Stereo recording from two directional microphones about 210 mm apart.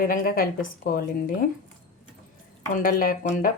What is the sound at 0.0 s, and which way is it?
Speech, 40° left (ahead or behind).